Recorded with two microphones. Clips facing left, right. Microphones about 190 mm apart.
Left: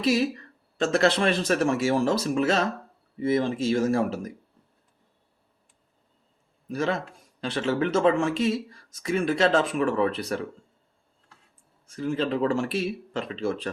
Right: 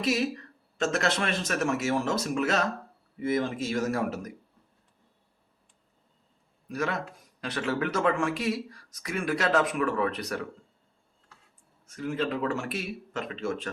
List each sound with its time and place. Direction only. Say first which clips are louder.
0.0 s speech: left 4 dB; 30° left (ahead or behind)
6.7 s speech: left 4 dB; 30° left (ahead or behind)
11.9 s speech: left 3 dB; 30° left (ahead or behind)